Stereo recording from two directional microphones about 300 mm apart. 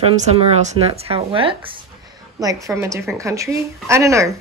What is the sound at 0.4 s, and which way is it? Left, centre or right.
A woman's voice, centre.